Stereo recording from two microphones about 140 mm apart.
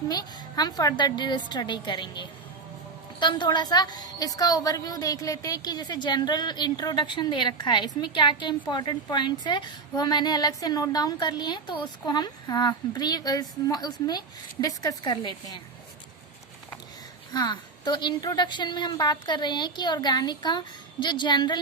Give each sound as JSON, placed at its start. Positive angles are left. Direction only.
{"t": 0.1, "sound": "a woman's voice", "side_deg": 30}
{"t": 17.3, "sound": "a woman's voice", "side_deg": 30}